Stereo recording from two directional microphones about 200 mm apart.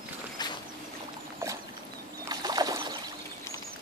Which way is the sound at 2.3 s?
20° right (ahead or behind).